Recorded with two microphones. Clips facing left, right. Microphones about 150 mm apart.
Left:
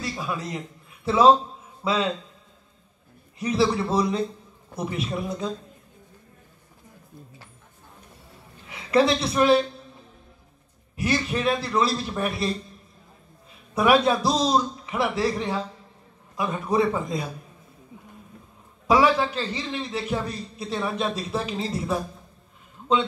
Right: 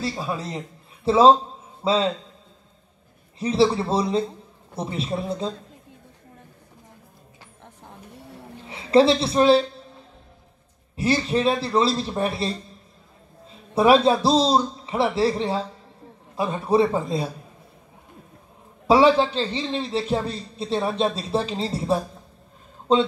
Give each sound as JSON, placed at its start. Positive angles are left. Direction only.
{"t": 0.0, "sound": "a man's voice", "side_deg": -30}
{"t": 3.3, "sound": "a man's voice", "side_deg": -30}
{"t": 7.6, "sound": "vehicle", "side_deg": -70}
{"t": 8.6, "sound": "a woman's voice", "side_deg": -30}
{"t": 11.0, "sound": "a man's voice", "side_deg": -30}
{"t": 18.9, "sound": "a man's voice", "side_deg": -30}